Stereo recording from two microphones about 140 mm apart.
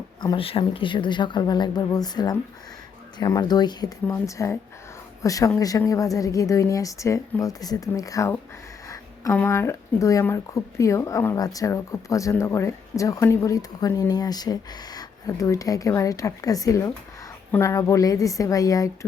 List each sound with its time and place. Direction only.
0.3 s speech: 40° left (ahead or behind); by 18.9 s 25° left (ahead or behind)